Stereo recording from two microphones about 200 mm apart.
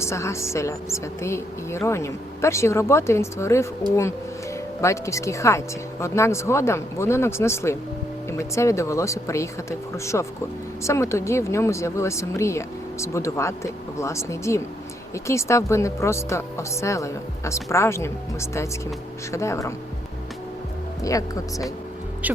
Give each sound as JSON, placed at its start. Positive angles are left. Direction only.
{"t": 0.0, "sound": "speech", "side_deg": 15}
{"t": 4.8, "sound": "speech", "side_deg": 15}
{"t": 21.0, "sound": "speech", "side_deg": 15}